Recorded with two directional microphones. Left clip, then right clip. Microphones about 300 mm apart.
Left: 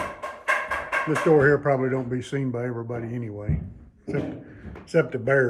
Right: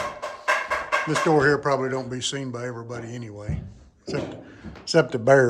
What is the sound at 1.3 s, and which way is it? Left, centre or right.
Speech, centre.